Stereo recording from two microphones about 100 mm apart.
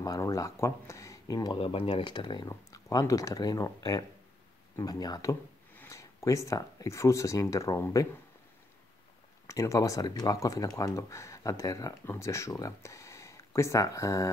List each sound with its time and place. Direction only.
0.0 s speech: 35° left (ahead or behind)
1.5 s speech: 65° left (ahead or behind)
2.0 s speech: 50° left (ahead or behind)
2.5 s speech: 40° left (ahead or behind)
9.5 s speech: 35° left (ahead or behind)